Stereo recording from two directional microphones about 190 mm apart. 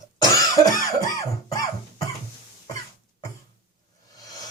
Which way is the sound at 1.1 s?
15° left (ahead or behind).